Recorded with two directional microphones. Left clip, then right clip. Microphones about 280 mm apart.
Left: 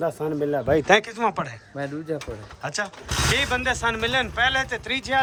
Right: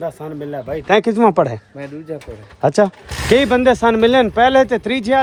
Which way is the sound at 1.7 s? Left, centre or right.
Centre.